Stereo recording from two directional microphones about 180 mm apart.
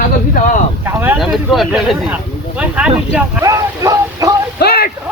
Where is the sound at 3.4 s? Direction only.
20° right (ahead or behind).